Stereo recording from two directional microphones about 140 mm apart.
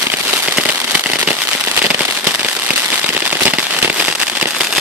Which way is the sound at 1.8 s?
10° right (ahead or behind).